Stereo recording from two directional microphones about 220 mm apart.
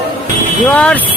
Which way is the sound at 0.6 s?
5° left (ahead or behind).